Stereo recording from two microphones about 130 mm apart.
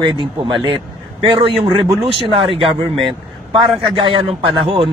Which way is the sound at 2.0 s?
45° right (ahead or behind).